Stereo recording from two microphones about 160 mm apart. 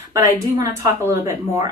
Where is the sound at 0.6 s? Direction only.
20° right (ahead or behind).